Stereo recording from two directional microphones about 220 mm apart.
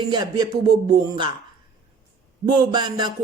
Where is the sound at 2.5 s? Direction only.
20° right (ahead or behind).